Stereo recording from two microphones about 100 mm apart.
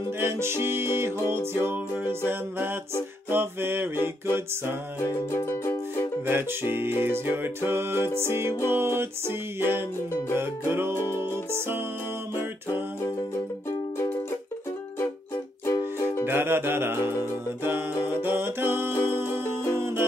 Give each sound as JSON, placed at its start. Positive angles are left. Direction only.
{"t": 0.2, "sound": "music", "side_deg": -25}
{"t": 5.3, "sound": "music", "side_deg": 25}
{"t": 6.2, "sound": "music", "side_deg": -20}
{"t": 15.6, "sound": "music", "side_deg": 30}
{"t": 16.3, "sound": "music", "side_deg": -20}